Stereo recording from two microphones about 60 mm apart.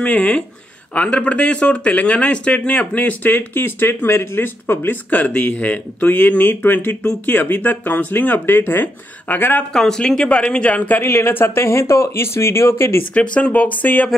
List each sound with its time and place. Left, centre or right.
0.0 s speech: left
9.8 s speech: centre
11.0 s speech: left
13.1 s speech: left